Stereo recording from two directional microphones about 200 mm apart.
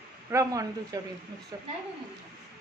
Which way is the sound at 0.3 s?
15° right (ahead or behind).